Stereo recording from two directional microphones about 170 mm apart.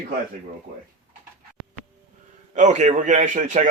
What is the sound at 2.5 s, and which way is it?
A man's voice, 45° right (ahead or behind).